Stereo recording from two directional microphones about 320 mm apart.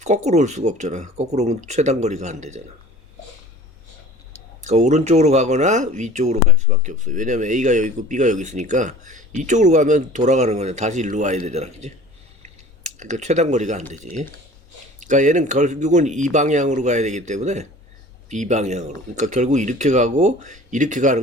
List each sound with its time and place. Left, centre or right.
0.0 s speech: right
4.6 s speech: right
12.4 s a sound: right
13.9 s speech: right